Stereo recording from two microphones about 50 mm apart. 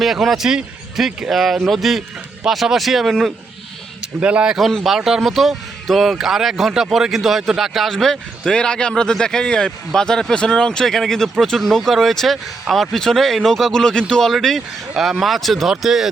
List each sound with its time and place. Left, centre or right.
0.0 s speech: centre
4.0 s a man's voice: right
4.9 s speech: centre
7.9 s speech: centre
15.8 s speech: centre